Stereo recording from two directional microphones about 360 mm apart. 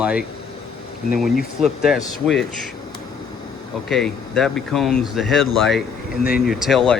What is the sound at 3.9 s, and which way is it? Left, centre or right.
Speech, centre.